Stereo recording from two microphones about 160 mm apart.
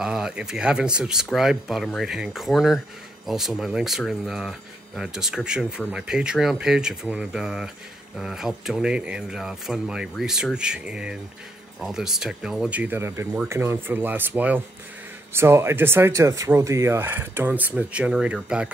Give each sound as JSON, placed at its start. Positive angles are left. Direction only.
{"t": 0.0, "sound": "speech", "side_deg": -5}